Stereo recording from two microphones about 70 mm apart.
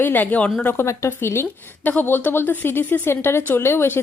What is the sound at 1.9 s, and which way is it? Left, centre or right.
A woman's voice, left.